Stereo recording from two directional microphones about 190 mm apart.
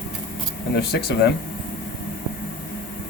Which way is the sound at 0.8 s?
60° left (ahead or behind).